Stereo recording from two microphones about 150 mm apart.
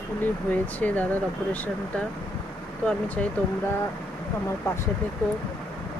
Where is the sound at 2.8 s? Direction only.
10° left (ahead or behind).